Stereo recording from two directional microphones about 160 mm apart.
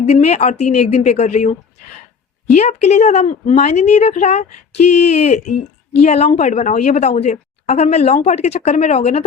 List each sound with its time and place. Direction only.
0.0 s speech: 40° left (ahead or behind)
2.6 s speech: 45° left (ahead or behind)